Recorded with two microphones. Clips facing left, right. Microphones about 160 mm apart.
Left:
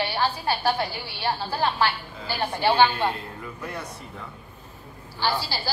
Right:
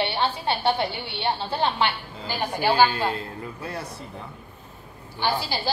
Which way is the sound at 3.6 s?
30° right (ahead or behind).